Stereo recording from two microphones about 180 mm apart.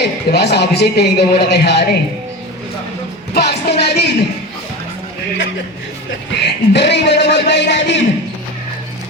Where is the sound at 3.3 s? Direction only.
65° left (ahead or behind).